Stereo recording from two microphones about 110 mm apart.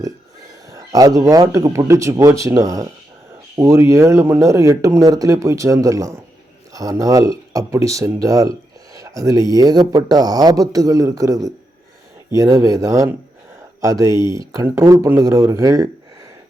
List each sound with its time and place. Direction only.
0.8 s speech: 35° right (ahead or behind)